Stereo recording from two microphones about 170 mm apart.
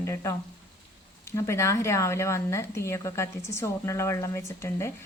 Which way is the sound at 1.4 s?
15° left (ahead or behind).